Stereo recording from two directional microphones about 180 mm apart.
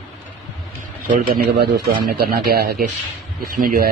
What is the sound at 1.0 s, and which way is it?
A man's voice, 50° right (ahead or behind).